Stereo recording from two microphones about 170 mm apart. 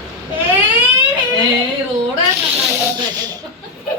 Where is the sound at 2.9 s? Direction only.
20° right (ahead or behind).